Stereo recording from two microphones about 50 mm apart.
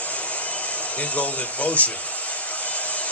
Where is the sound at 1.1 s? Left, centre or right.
Left.